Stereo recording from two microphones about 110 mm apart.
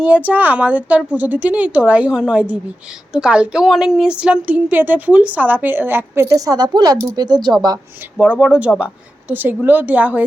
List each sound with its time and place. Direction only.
0.0 s a woman's voice: 15° right (ahead or behind); by 7.5 s 40° right (ahead or behind)
8.2 s a woman's voice: 10° right (ahead or behind)